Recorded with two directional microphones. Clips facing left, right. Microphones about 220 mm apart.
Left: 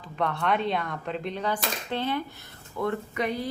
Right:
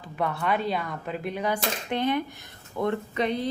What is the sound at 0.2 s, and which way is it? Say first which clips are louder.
A woman's voice: even; 5° right (ahead or behind).